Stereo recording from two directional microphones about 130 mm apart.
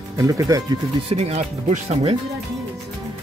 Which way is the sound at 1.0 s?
55° right (ahead or behind).